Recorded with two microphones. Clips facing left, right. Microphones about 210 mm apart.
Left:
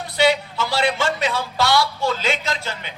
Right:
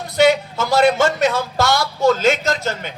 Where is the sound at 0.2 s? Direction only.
45° right (ahead or behind).